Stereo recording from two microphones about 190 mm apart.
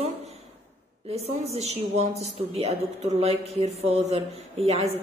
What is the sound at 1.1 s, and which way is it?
A woman's voice, 35° right (ahead or behind).